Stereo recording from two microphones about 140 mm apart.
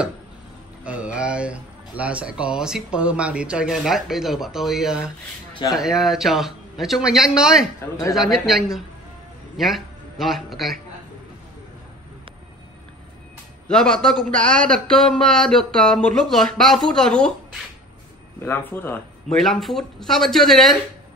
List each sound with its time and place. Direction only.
0.8 s a man's voice: 10° right (ahead or behind)
13.7 s speech: 5° left (ahead or behind)
18.4 s speech: 15° left (ahead or behind)
19.3 s speech: centre (ahead or behind)